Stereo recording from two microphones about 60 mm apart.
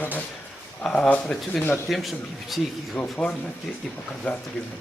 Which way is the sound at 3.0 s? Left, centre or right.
Left.